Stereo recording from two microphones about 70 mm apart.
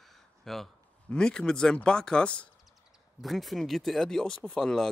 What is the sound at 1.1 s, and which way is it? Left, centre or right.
Speech, centre.